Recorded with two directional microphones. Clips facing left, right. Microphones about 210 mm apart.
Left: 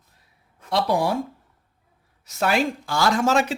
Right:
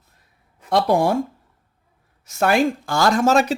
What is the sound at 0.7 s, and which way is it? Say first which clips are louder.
Speech: right 4 dB; 50° right (ahead or behind).